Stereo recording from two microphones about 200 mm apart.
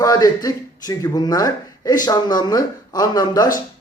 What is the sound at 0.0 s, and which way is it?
Speech, 20° left (ahead or behind).